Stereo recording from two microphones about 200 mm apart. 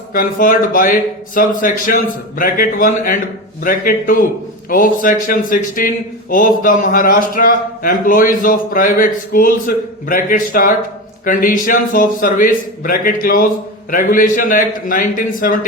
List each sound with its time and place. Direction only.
0.1 s a man's voice: 45° left (ahead or behind)